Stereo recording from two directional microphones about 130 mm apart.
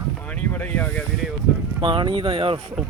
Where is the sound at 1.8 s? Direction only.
40° right (ahead or behind).